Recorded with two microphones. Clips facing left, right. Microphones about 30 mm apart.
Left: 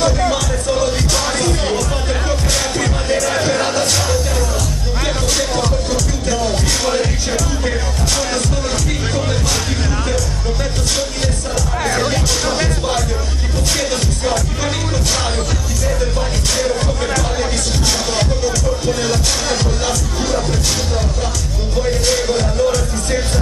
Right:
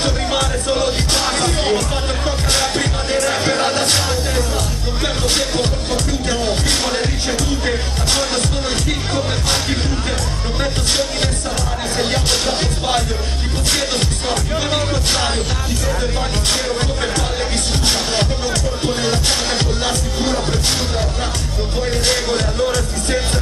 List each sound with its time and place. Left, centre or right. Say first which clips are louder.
0.0 s music: left 3 dB; right
5.4 s music: left 2 dB; right
8.1 s music: right 1 dB; right
12.0 s music: left 1 dB; right
17.8 s music: even; right
20.2 s music: even; right
22.0 s music: left 2 dB; right